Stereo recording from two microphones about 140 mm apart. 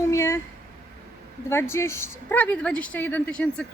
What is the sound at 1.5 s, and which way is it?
A woman's voice, 15° left (ahead or behind).